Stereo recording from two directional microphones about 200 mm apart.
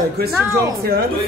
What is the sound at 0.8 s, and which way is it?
Speech, 50° right (ahead or behind).